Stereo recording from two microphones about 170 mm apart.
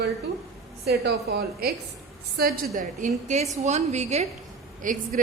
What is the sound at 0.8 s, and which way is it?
A woman's voice, 70° right (ahead or behind).